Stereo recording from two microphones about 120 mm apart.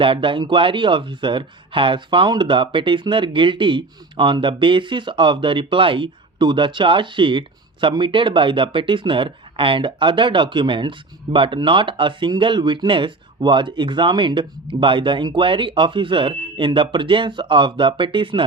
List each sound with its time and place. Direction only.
0.0 s speech: 45° right (ahead or behind)